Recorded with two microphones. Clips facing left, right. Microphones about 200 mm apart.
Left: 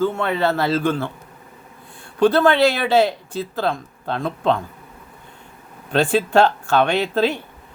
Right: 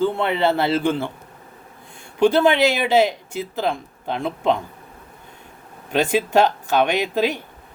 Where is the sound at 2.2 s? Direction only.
15° right (ahead or behind).